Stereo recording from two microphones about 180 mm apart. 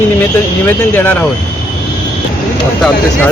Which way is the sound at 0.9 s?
10° left (ahead or behind).